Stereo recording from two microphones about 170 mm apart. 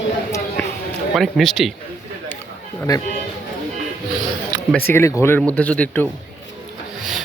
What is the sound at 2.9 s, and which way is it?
Speech, 20° left (ahead or behind).